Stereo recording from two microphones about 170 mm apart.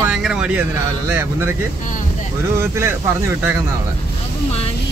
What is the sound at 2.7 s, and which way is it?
Speech, 15° right (ahead or behind).